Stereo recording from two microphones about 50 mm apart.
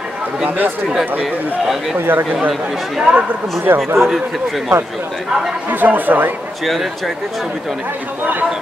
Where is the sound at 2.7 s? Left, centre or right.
Centre.